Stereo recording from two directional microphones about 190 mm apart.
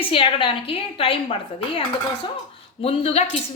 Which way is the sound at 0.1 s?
30° left (ahead or behind).